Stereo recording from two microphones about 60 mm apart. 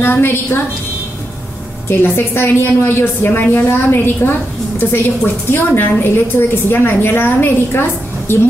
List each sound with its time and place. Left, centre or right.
0.0 s a woman's voice: left
1.9 s a woman's voice: left